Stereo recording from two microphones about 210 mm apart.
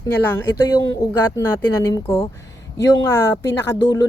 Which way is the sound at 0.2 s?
10° left (ahead or behind).